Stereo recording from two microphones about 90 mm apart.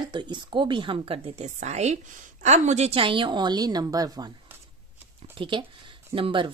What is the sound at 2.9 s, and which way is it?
A woman's voice, 70° right (ahead or behind).